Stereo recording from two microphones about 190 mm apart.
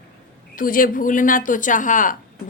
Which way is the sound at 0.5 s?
50° left (ahead or behind).